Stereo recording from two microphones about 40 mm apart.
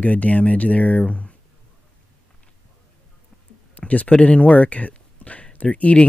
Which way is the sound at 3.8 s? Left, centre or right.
Left.